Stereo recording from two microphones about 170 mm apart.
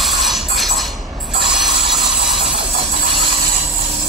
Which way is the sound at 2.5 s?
30° right (ahead or behind).